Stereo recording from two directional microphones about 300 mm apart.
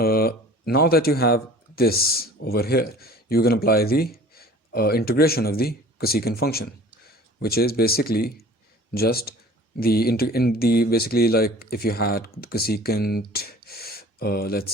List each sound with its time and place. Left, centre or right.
0.0 s speech: left